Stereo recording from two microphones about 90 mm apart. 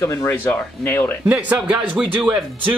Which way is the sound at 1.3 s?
15° right (ahead or behind).